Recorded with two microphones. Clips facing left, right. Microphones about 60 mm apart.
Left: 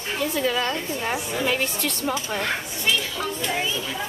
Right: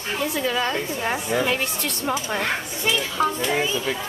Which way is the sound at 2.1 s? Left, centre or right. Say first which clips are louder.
Right 3 dB; centre.